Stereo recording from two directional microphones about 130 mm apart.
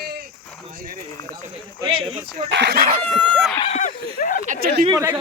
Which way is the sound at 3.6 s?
65° left (ahead or behind).